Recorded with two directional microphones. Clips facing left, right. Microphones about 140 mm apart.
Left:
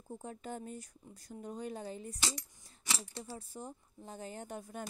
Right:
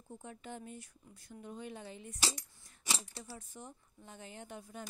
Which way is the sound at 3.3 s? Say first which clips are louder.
Left 4 dB; 35° left (ahead or behind).